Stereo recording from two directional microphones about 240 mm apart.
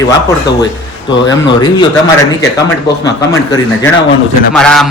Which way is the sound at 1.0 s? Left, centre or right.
Centre.